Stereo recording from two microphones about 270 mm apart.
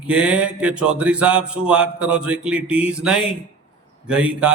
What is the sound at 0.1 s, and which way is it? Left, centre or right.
Speech, centre.